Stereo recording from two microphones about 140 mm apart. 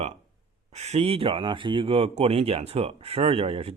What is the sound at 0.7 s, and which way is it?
Speech, 50° right (ahead or behind).